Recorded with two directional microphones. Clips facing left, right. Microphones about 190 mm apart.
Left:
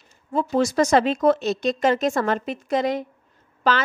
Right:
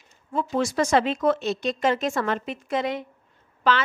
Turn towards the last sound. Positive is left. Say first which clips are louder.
# left 1 dB
turn(degrees=40)  # may be behind; listen again after turning